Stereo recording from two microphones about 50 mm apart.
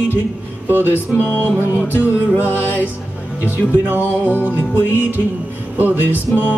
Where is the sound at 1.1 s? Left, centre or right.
Left.